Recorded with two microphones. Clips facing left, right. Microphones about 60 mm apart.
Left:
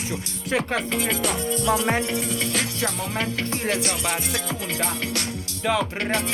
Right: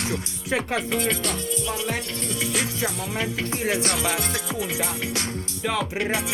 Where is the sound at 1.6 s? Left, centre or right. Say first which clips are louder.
Left 10 dB; left.